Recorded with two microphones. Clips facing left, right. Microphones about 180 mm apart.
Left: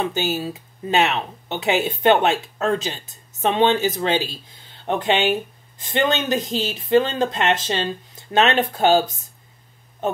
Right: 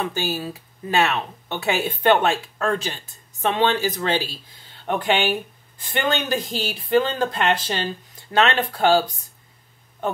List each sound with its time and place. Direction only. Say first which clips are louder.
0.0 s speech: left 3 dB; 20° left (ahead or behind)